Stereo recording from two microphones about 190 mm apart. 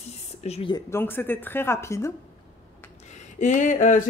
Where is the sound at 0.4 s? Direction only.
30° left (ahead or behind).